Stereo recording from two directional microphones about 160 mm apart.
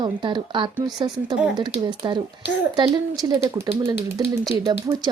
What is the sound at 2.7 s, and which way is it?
Speech, 25° right (ahead or behind).